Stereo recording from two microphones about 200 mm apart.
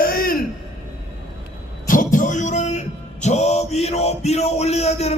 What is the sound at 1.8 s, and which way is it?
Speech, 40° left (ahead or behind).